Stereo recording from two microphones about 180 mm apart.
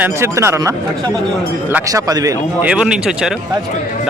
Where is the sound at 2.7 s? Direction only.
5° right (ahead or behind).